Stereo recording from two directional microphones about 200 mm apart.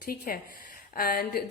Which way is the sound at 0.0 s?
45° left (ahead or behind).